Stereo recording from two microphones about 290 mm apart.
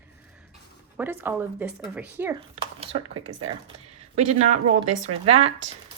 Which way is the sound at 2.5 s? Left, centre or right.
Centre.